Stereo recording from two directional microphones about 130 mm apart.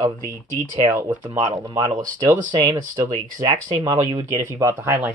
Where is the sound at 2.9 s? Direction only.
35° right (ahead or behind).